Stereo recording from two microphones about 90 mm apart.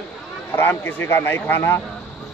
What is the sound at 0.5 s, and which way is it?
Speech, 25° left (ahead or behind).